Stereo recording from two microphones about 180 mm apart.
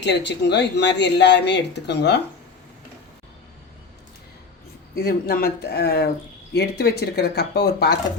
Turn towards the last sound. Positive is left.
turn(degrees=65)  # may be behind; listen again after turning